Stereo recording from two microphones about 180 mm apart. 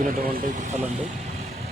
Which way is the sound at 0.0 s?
45° right (ahead or behind).